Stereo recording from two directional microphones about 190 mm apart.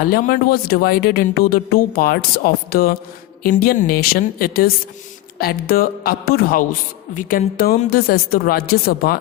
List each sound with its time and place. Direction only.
0.0 s speech: 50° left (ahead or behind)